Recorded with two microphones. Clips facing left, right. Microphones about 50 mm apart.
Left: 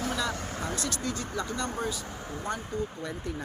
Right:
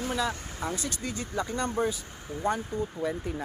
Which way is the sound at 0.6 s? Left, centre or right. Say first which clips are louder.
Right 1 dB; centre.